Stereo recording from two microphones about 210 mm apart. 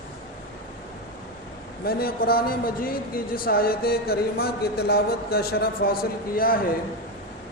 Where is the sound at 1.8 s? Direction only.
45° left (ahead or behind).